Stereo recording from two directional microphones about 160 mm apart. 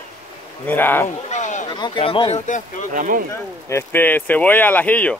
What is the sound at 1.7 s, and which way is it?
Speech, 30° left (ahead or behind).